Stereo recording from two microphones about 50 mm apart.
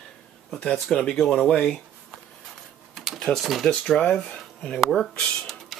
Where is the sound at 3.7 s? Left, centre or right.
Centre.